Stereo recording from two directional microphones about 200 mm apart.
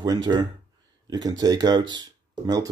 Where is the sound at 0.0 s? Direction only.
20° right (ahead or behind).